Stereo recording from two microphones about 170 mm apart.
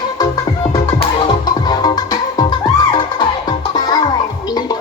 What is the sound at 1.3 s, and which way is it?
Music, 25° left (ahead or behind).